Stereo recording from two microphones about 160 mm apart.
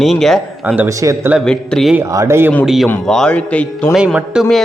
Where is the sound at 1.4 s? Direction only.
5° left (ahead or behind).